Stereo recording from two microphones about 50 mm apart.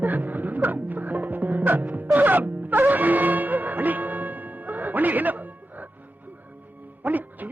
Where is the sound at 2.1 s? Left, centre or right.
Right.